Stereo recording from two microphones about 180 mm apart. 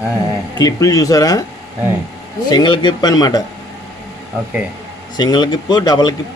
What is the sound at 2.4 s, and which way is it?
Speech, 25° left (ahead or behind).